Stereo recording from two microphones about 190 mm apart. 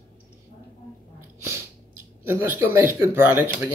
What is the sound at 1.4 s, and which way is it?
Sneeze, 15° right (ahead or behind).